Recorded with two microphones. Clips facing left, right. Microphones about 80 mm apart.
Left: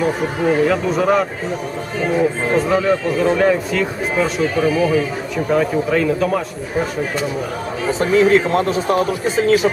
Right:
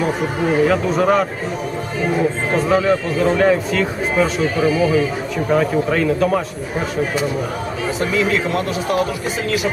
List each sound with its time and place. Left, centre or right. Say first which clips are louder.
0.0 s speech: left 1 dB; centre
8.1 s a man's voice: left 7 dB; left